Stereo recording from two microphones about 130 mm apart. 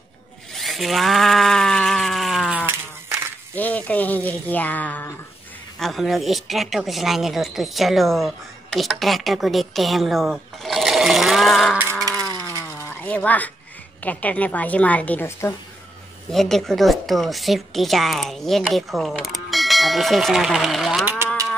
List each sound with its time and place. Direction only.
0.5 s a sound: centre (ahead or behind)
2.6 s sheep: 15° right (ahead or behind)
3.5 s speech: 10° left (ahead or behind)
5.8 s a woman's voice: centre (ahead or behind)
12.4 s a sound: 20° left (ahead or behind)
14.0 s a woman's voice: 10° left (ahead or behind)
16.3 s a woman's voice: centre (ahead or behind)
21.0 s cattle: 15° right (ahead or behind)